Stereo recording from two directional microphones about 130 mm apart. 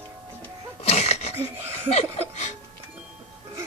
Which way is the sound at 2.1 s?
60° left (ahead or behind).